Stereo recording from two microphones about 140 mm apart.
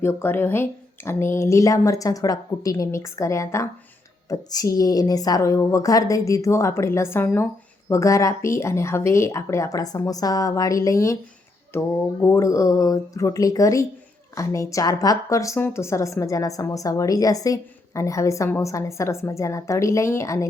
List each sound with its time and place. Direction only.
0.0 s a woman's voice: 15° left (ahead or behind)
12.2 s a woman's voice: 20° left (ahead or behind)